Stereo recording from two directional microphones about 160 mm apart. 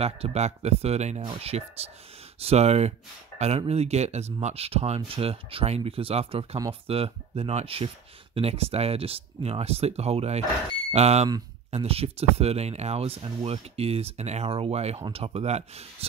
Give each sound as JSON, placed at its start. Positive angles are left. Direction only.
{"t": 0.0, "sound": "speech", "side_deg": -40}